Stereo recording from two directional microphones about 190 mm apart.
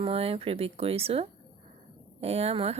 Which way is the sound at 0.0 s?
30° right (ahead or behind).